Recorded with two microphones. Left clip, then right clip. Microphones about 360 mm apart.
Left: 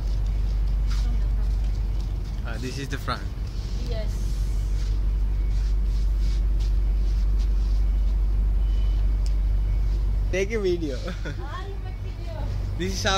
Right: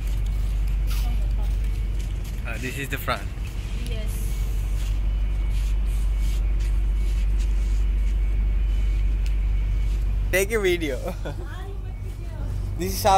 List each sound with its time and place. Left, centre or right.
2.4 s speech: centre
10.3 s speech: right
12.7 s speech: centre